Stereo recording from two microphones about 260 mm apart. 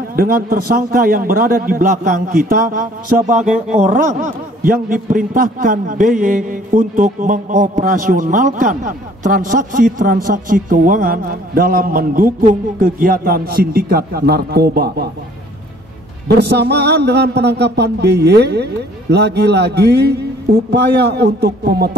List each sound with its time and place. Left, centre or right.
0.1 s a man's voice: right
16.3 s a man's voice: right